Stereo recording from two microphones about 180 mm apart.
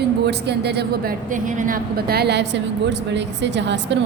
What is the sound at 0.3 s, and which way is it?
Speech, 65° right (ahead or behind).